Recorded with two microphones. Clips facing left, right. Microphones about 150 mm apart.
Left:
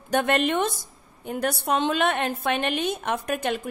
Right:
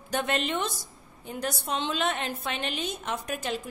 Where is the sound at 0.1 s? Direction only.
55° left (ahead or behind).